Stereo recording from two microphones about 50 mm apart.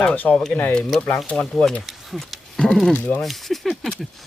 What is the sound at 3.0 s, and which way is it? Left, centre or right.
Speech, left.